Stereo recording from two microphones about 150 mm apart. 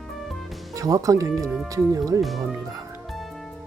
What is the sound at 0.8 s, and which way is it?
Speech, 25° right (ahead or behind).